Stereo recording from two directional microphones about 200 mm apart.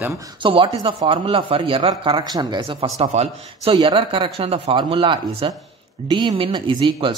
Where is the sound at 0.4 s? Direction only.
25° right (ahead or behind).